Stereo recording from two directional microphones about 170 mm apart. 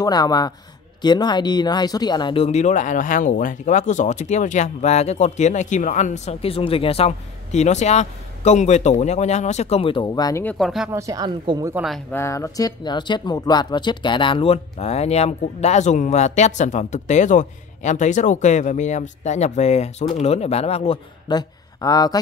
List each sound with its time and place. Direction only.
0.0 s speech: 20° left (ahead or behind)
10.4 s speech: 5° left (ahead or behind)
10.9 s speech: 20° right (ahead or behind)
11.7 s speech: centre (ahead or behind)
12.1 s speech: 15° left (ahead or behind); by 21.0 s 35° left (ahead or behind)
21.3 s speech: 25° left (ahead or behind)